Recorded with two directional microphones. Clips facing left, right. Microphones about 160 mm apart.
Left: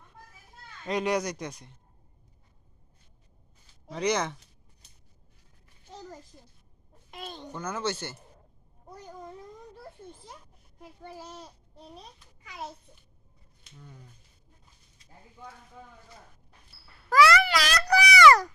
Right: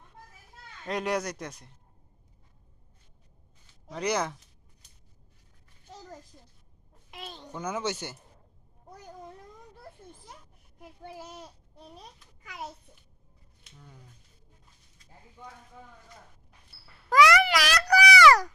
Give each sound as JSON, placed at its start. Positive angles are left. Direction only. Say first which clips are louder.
{"t": 0.9, "sound": "speech", "louder": "left 2 dB", "side_deg": 0}
{"t": 3.8, "sound": "speech", "louder": "left 1 dB", "side_deg": -5}
{"t": 7.1, "sound": "babbling", "louder": "left 2 dB", "side_deg": 0}
{"t": 7.5, "sound": "a child's voice", "louder": "even", "side_deg": -15}
{"t": 10.8, "sound": "a child's voice", "louder": "even", "side_deg": -10}
{"t": 13.7, "sound": "speech", "louder": "left 3 dB", "side_deg": 0}
{"t": 17.1, "sound": "a sound", "louder": "even", "side_deg": -15}